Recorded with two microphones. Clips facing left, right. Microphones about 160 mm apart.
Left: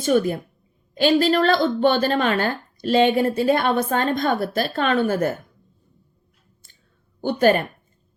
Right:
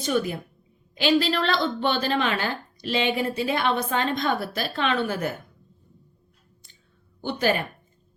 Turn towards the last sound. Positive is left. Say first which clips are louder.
# left 7 dB
turn(degrees=50)  # may be behind; listen again after turning